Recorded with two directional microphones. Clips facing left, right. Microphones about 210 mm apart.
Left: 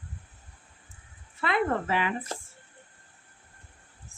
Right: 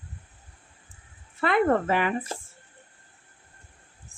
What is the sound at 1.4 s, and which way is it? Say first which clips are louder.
Speech: right 5 dB; 50° right (ahead or behind).